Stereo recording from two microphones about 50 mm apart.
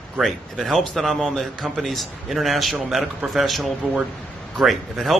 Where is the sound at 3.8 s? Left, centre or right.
Centre.